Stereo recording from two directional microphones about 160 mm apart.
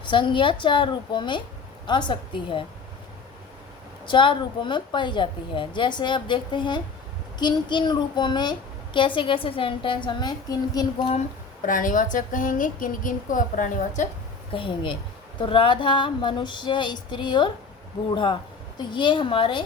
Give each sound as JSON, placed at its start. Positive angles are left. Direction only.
{"t": 0.0, "sound": "a woman's voice", "side_deg": 30}
{"t": 4.0, "sound": "a woman's voice", "side_deg": 30}
{"t": 11.6, "sound": "speech", "side_deg": 55}
{"t": 14.5, "sound": "a woman's voice", "side_deg": 30}